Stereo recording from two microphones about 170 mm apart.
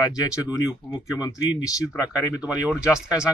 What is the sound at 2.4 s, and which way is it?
Speech, 5° right (ahead or behind).